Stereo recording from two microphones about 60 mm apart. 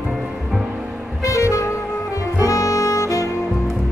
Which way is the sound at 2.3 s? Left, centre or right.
Left.